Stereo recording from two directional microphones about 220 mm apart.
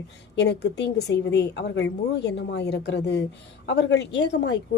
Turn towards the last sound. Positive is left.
turn(degrees=50)  # may be behind; listen again after turning